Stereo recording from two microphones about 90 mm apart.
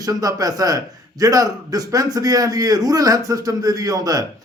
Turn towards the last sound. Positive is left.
turn(degrees=-45)  # may be behind; listen again after turning